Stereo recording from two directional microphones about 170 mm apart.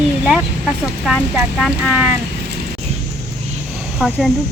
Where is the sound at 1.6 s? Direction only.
5° right (ahead or behind).